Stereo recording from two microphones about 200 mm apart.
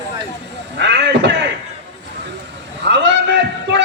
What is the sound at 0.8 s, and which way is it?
Radio, 60° right (ahead or behind).